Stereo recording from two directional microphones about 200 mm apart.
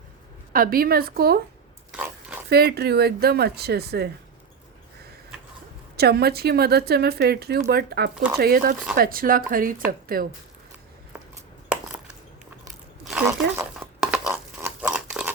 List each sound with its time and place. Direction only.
0.5 s speech: 45° right (ahead or behind)
1.9 s pig: 5° right (ahead or behind)
2.5 s speech: 50° right (ahead or behind)
6.0 s speech: 50° right (ahead or behind)
13.1 s speech: 10° right (ahead or behind)
13.7 s a sound: centre (ahead or behind)